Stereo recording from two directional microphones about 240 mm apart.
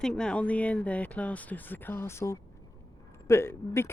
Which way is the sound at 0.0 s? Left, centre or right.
Centre.